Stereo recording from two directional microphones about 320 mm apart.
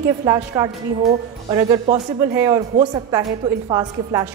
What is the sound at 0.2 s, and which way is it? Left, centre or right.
A woman's voice, centre.